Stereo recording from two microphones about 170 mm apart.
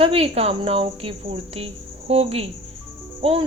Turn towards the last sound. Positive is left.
turn(degrees=-35)  # may be behind; listen again after turning